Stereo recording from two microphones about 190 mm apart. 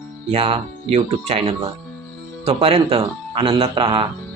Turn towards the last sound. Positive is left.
turn(degrees=-30)  # may be behind; listen again after turning